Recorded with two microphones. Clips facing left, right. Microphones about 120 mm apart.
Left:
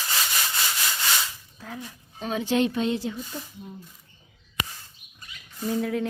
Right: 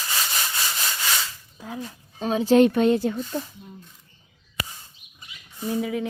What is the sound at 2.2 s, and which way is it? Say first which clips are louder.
A woman's voice: right 7 dB; 35° right (ahead or behind).